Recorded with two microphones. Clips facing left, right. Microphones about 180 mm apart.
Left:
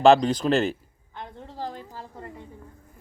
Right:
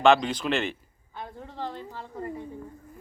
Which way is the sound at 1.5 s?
35° left (ahead or behind).